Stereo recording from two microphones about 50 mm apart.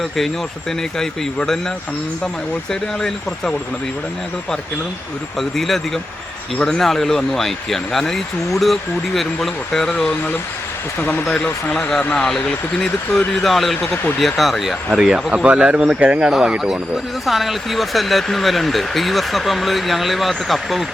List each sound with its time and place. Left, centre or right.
0.9 s speech: centre
5.4 s speech: centre
12.2 s speech: centre
14.9 s speech: centre
16.3 s speech: centre
17.2 s speech: centre